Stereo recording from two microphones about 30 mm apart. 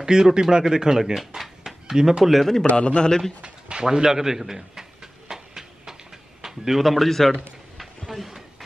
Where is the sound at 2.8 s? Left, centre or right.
Left.